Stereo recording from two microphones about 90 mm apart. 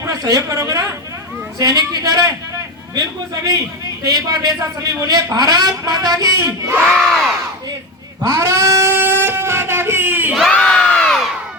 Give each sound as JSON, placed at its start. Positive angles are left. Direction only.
{"t": 0.0, "sound": "a woman's voice", "side_deg": -40}
{"t": 6.8, "sound": "crowd", "side_deg": 5}
{"t": 8.3, "sound": "a sound", "side_deg": -35}
{"t": 10.6, "sound": "crowd", "side_deg": 5}